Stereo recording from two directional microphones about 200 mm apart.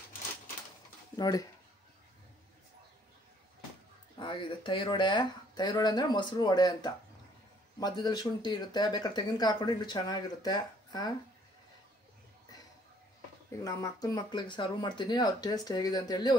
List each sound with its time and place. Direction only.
1.1 s speech: 20° left (ahead or behind)
4.2 s speech: 25° left (ahead or behind)
13.5 s speech: 15° left (ahead or behind)